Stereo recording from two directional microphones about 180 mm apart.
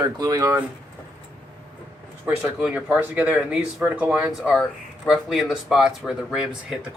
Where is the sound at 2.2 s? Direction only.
10° right (ahead or behind).